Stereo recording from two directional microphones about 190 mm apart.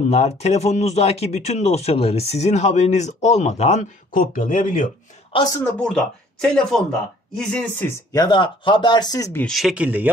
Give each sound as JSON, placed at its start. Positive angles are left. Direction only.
{"t": 0.1, "sound": "a man's voice", "side_deg": 35}
{"t": 5.3, "sound": "speech", "side_deg": 20}
{"t": 5.8, "sound": "speech", "side_deg": 5}
{"t": 8.1, "sound": "speech", "side_deg": 20}
{"t": 9.5, "sound": "speech", "side_deg": 0}